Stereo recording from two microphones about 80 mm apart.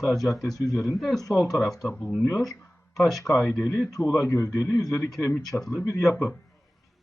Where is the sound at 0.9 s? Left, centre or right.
Centre.